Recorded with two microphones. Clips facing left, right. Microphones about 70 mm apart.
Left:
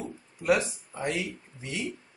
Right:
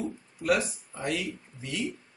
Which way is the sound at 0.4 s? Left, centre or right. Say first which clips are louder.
Left 1 dB; centre.